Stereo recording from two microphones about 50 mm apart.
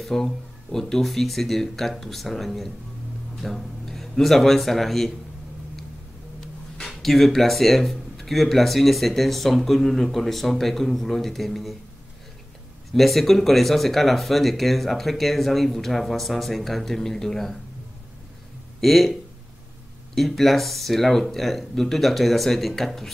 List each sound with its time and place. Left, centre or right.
0.0 s speech: centre
7.0 s speech: centre
12.9 s speech: centre
18.8 s speech: centre
20.2 s speech: centre